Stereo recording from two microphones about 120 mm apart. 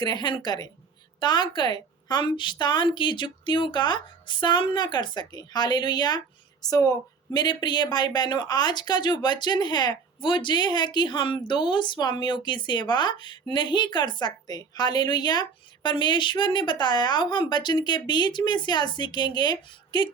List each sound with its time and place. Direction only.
0.0 s a woman's voice: 40° left (ahead or behind)